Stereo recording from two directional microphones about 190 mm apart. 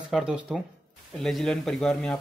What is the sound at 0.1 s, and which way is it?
Speech, 5° right (ahead or behind).